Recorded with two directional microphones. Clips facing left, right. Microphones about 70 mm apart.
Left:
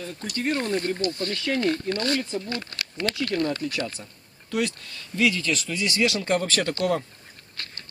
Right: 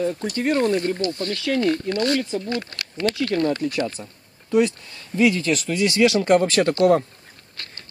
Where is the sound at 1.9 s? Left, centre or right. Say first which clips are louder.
Right 4 dB; centre.